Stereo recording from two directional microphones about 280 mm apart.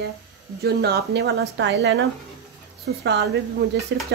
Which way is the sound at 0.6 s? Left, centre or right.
Right.